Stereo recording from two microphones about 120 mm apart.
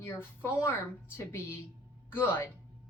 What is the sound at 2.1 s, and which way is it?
Speech, 15° left (ahead or behind).